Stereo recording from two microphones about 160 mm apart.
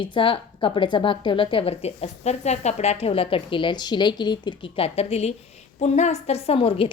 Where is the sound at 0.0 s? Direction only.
30° left (ahead or behind).